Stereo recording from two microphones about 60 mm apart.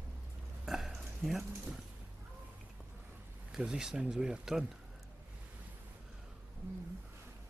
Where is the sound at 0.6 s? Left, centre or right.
Centre.